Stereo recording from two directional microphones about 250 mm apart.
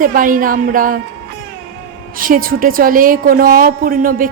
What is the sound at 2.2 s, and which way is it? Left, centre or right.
A woman's voice, right.